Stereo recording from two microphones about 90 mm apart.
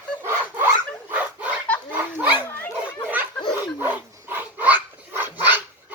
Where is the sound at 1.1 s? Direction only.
15° right (ahead or behind).